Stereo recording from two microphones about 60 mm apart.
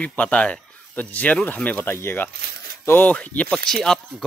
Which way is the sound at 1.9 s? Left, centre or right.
Left.